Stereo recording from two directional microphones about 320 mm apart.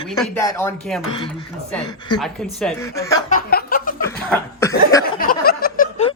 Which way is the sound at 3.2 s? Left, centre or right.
Left.